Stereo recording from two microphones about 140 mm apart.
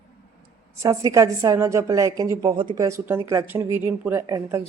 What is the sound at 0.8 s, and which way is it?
A woman's voice, 20° right (ahead or behind).